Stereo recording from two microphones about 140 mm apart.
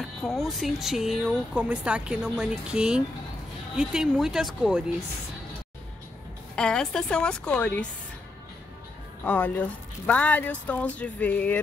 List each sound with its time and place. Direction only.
0.2 s speech: centre (ahead or behind)
6.5 s speech: 5° left (ahead or behind)
9.2 s a woman's voice: 10° left (ahead or behind)